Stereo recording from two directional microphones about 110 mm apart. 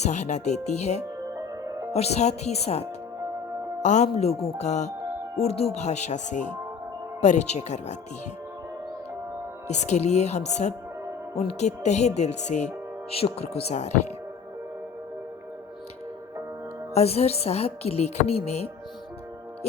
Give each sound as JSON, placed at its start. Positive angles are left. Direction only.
{"t": 0.0, "sound": "speech", "side_deg": 90}
{"t": 1.9, "sound": "speech", "side_deg": 70}
{"t": 3.8, "sound": "speech", "side_deg": 90}
{"t": 5.4, "sound": "speech", "side_deg": 70}
{"t": 9.6, "sound": "speech", "side_deg": 90}
{"t": 16.9, "sound": "speech", "side_deg": 70}